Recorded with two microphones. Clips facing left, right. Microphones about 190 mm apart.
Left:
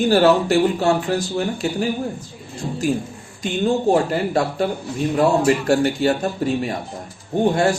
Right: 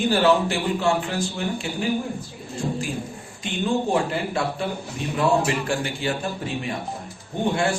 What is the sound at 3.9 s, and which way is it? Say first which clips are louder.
Speech: left 6 dB; 45° left (ahead or behind).